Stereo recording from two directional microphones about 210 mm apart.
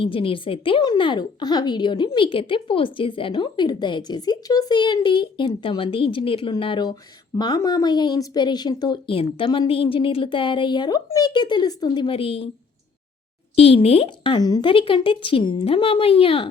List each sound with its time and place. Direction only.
0.0 s a woman's voice: 25° left (ahead or behind)
13.6 s a woman's voice: 30° left (ahead or behind)